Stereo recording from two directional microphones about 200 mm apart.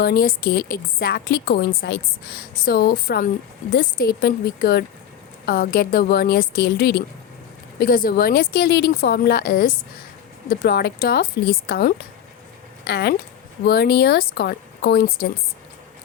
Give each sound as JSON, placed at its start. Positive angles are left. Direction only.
{"t": 0.0, "sound": "a woman's voice", "side_deg": 45}